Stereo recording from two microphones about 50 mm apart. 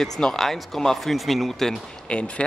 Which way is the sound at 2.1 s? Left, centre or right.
Left.